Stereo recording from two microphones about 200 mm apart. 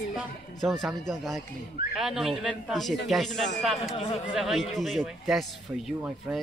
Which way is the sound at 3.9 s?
25° left (ahead or behind).